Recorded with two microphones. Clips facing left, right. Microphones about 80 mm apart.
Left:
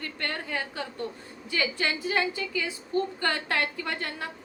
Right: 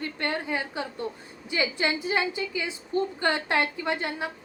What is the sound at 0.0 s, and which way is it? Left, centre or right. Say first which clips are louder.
A woman's voice: right 4 dB; right.